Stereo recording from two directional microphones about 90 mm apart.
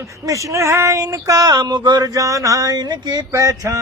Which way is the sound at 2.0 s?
40° right (ahead or behind).